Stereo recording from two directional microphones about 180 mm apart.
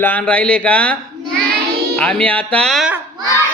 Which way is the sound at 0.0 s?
10° left (ahead or behind).